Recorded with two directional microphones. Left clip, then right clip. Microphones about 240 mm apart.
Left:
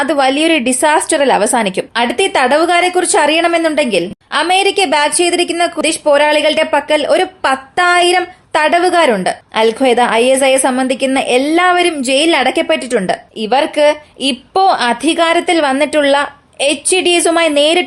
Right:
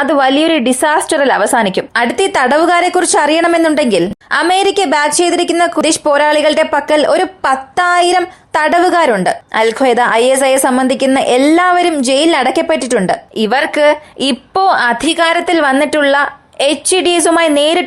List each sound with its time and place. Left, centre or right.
0.0 s a woman's voice: centre